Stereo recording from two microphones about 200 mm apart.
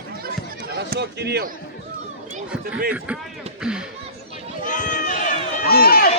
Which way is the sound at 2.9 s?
5° right (ahead or behind).